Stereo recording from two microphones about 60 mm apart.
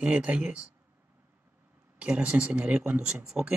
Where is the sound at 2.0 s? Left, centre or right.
Right.